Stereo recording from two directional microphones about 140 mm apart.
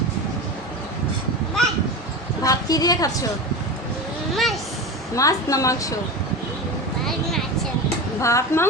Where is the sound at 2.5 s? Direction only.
25° left (ahead or behind).